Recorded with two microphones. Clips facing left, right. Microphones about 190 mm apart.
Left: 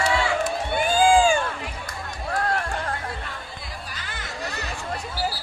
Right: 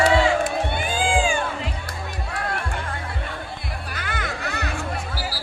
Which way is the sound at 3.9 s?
55° right (ahead or behind).